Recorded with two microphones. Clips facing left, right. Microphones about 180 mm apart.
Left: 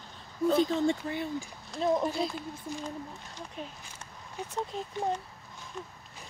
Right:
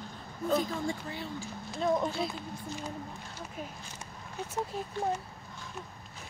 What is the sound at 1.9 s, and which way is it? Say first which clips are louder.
Speech: left 2 dB; centre (ahead or behind).